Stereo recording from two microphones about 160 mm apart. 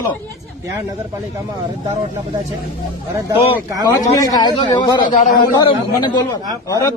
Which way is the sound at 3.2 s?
20° right (ahead or behind).